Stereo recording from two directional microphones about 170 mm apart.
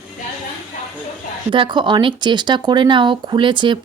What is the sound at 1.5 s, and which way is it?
Speech, 30° right (ahead or behind).